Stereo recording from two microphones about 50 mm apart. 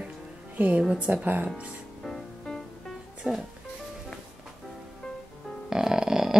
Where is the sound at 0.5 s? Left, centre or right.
Right.